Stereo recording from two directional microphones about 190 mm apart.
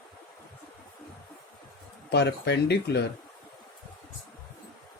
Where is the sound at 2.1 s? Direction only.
60° left (ahead or behind).